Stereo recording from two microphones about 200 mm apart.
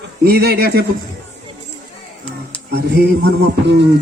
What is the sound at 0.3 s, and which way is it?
Speech, 50° right (ahead or behind).